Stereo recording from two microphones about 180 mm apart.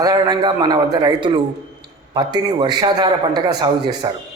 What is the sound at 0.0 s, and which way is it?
A man's voice, 20° right (ahead or behind).